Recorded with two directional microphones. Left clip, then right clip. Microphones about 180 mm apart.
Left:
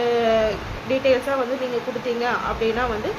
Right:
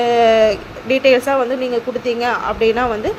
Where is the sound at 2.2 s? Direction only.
45° right (ahead or behind).